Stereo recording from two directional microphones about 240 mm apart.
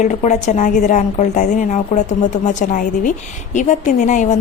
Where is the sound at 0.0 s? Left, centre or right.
Left.